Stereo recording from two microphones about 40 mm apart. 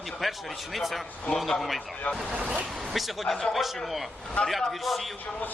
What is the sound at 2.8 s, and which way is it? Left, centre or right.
Speech, centre.